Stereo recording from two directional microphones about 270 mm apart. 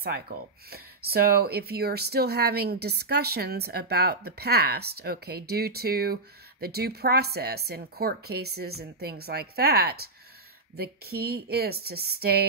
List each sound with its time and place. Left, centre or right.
0.0 s speech: right